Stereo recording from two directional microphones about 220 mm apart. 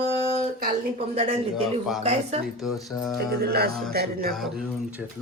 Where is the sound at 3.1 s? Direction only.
45° right (ahead or behind).